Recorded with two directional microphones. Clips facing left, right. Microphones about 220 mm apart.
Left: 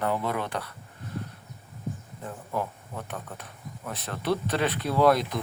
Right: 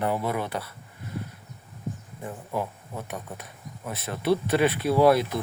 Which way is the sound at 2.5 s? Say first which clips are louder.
Right 1 dB; 10° right (ahead or behind).